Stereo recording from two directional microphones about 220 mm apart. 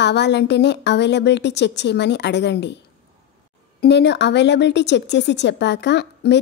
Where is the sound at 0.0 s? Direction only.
50° left (ahead or behind).